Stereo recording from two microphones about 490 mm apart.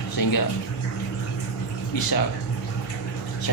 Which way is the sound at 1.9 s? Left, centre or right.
Left.